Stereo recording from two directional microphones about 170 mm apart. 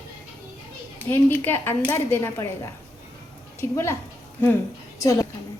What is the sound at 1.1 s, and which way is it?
A woman's voice, 10° left (ahead or behind).